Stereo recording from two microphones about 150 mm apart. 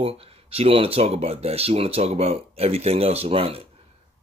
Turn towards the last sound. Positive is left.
turn(degrees=-40)  # may be behind; listen again after turning